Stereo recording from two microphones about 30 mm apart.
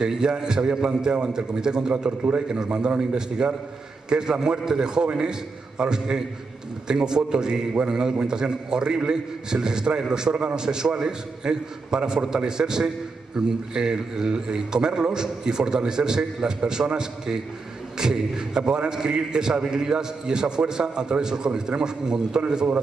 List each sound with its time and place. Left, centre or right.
0.1 s a man's voice: right